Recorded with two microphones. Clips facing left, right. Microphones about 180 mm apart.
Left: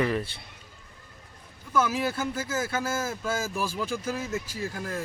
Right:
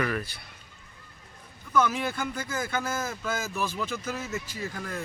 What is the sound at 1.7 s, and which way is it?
Speech, 5° left (ahead or behind).